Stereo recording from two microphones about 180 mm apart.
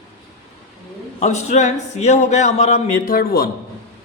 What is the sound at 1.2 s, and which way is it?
A man's voice, 40° left (ahead or behind).